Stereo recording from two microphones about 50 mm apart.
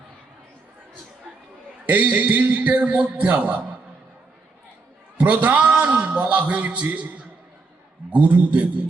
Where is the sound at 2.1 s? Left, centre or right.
Right.